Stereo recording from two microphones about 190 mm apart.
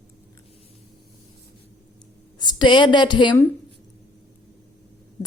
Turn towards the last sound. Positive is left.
turn(degrees=25)  # may be behind; listen again after turning